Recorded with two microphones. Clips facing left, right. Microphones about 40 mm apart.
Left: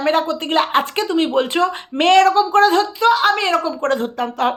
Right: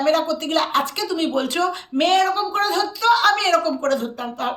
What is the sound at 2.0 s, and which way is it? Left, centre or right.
Speech, left.